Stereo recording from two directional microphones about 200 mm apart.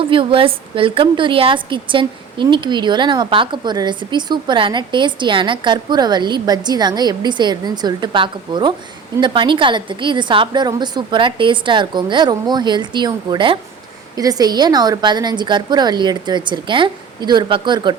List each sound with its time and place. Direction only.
0.1 s a woman's voice: 25° right (ahead or behind)